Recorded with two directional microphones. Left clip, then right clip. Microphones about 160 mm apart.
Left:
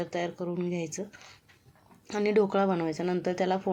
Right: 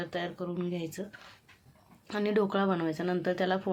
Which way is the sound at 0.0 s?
15° left (ahead or behind).